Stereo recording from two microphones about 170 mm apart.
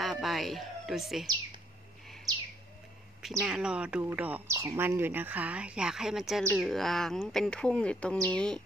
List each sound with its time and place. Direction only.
0.0 s a woman's voice: centre (ahead or behind)
2.3 s bird: 25° right (ahead or behind)
3.2 s speech: centre (ahead or behind)